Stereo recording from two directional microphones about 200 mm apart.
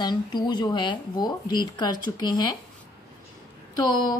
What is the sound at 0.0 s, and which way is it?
A woman's voice, 20° left (ahead or behind).